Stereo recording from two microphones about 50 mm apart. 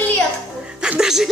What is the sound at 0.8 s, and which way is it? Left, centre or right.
Speech, centre.